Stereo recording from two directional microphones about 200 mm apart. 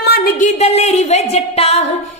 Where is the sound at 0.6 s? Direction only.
30° left (ahead or behind).